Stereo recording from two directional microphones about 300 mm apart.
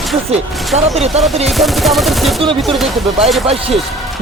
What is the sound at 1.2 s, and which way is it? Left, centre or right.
Machine gun, centre.